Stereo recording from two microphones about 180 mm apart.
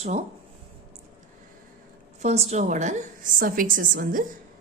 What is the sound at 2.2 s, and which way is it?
A woman's voice, 35° right (ahead or behind).